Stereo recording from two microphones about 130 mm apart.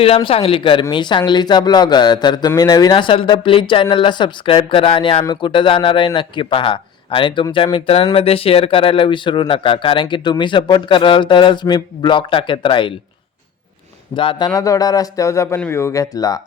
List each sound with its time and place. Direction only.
0.0 s speech: 45° left (ahead or behind)
14.2 s speech: 35° left (ahead or behind)